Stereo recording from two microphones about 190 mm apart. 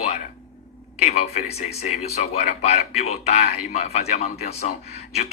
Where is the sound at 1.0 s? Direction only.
35° left (ahead or behind).